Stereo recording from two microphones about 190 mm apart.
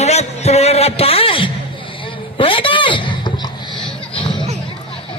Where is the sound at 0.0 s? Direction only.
35° left (ahead or behind).